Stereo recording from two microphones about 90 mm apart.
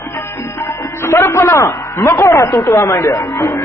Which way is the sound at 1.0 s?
30° left (ahead or behind).